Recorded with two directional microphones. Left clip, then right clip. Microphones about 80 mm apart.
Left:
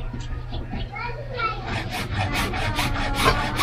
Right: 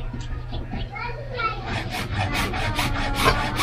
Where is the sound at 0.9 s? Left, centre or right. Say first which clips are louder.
Even; centre.